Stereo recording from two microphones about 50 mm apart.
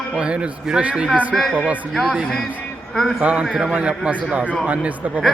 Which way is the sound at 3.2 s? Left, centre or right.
Right.